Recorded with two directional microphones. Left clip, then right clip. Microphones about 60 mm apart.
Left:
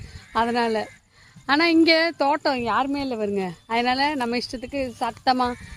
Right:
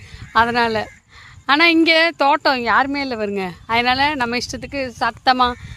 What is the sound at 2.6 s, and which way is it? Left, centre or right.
Speech, right.